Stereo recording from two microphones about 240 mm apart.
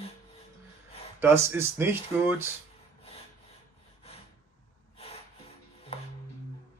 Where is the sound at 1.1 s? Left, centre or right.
Centre.